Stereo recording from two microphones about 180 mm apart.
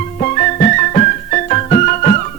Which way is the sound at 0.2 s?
45° left (ahead or behind).